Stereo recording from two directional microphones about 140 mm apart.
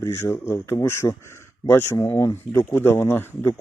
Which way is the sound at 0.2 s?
15° left (ahead or behind).